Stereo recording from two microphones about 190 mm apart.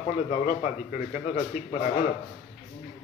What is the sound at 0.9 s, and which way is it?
Speech, 45° left (ahead or behind).